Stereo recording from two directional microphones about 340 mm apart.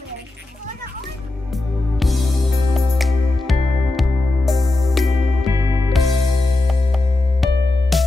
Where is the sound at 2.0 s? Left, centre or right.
Centre.